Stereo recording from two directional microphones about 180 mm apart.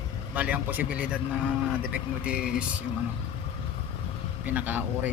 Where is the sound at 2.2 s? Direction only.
5° right (ahead or behind).